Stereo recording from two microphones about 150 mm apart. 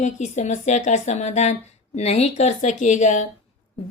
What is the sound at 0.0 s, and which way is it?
Speech, 50° left (ahead or behind).